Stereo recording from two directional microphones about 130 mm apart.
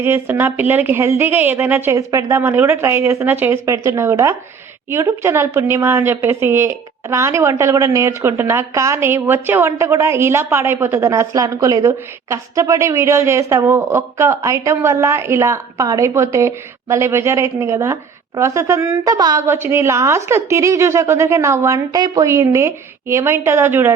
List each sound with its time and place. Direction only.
0.0 s a woman's voice: 15° right (ahead or behind)